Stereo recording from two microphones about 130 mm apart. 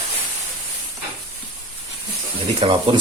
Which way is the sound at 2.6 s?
40° right (ahead or behind).